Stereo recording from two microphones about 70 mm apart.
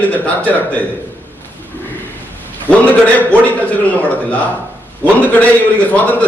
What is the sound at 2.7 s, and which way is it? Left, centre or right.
Speech, left.